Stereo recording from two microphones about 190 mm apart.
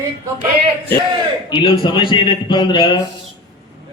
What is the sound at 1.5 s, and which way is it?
A man's voice, 25° left (ahead or behind).